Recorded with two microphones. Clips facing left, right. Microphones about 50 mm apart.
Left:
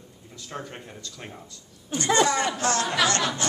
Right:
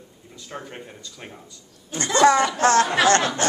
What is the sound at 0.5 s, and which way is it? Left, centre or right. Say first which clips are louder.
Speech: right 1 dB; centre.